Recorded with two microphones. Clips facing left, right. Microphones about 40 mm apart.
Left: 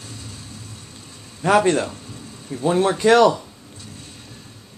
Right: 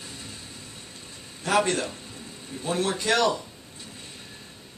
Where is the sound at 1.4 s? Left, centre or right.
Left.